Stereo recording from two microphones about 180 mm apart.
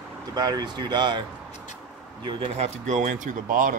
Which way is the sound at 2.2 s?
35° right (ahead or behind).